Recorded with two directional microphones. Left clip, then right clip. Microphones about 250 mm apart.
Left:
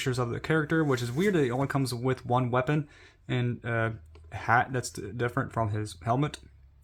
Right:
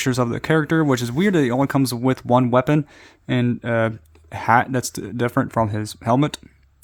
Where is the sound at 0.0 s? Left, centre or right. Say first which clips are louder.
Right 9 dB; right.